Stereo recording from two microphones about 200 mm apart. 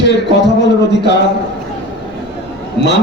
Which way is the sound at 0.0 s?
60° left (ahead or behind).